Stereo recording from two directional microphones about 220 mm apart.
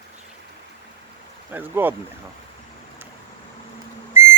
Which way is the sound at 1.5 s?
10° right (ahead or behind).